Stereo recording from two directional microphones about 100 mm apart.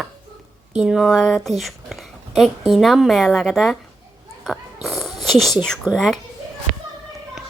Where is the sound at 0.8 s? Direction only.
5° right (ahead or behind).